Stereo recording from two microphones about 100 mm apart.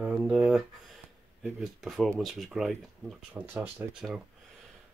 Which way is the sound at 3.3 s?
20° right (ahead or behind).